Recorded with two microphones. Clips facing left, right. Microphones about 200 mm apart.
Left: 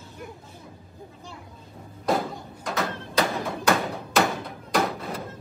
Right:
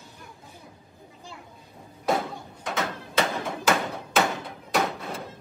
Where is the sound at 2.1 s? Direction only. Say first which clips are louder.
Left 1 dB; centre (ahead or behind).